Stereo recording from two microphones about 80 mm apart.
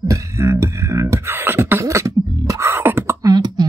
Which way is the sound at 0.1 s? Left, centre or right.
Right.